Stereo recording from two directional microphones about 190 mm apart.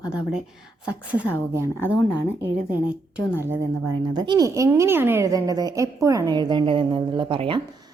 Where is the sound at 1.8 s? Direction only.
10° left (ahead or behind).